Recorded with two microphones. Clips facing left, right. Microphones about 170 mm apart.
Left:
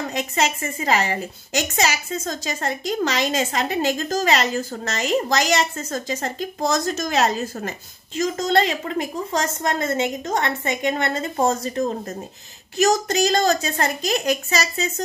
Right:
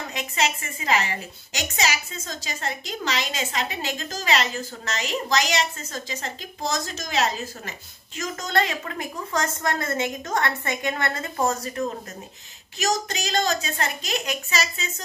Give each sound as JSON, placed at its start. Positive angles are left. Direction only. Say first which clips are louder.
{"t": 0.1, "sound": "a woman's voice", "louder": "left 1 dB", "side_deg": 40}
{"t": 8.2, "sound": "a woman's voice", "louder": "left 6 dB", "side_deg": 30}
{"t": 12.7, "sound": "a woman's voice", "louder": "left 8 dB", "side_deg": 40}